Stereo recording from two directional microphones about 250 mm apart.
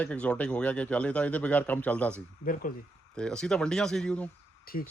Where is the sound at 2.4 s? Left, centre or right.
Left.